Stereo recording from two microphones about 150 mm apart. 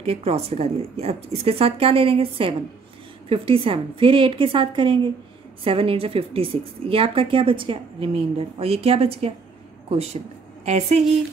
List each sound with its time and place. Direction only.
0.0 s a woman's voice: 45° right (ahead or behind)
10.6 s a woman's voice: 45° right (ahead or behind)